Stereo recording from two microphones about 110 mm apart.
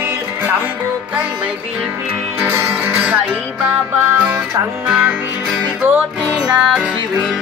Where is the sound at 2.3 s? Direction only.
25° right (ahead or behind).